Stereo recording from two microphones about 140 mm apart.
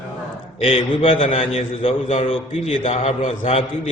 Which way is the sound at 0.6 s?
40° left (ahead or behind).